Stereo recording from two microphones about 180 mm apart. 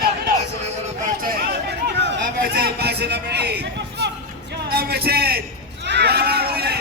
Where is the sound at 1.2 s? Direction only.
60° right (ahead or behind).